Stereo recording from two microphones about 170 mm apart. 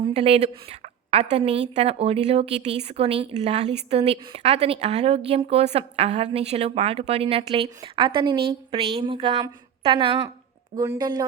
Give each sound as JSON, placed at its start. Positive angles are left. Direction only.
{"t": 0.0, "sound": "a woman's voice", "side_deg": -35}